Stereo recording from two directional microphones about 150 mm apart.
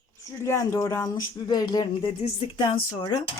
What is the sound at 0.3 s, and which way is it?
Speech, 20° left (ahead or behind).